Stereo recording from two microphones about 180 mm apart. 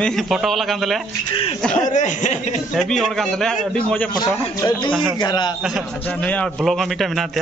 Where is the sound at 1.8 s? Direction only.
45° left (ahead or behind).